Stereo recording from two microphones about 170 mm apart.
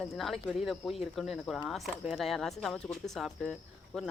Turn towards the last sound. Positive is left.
turn(degrees=0)  # may be behind; listen again after turning